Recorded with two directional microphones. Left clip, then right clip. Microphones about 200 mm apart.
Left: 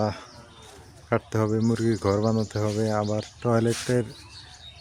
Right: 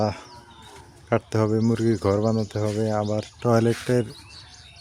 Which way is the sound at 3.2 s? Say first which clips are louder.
Right 3 dB; 20° right (ahead or behind).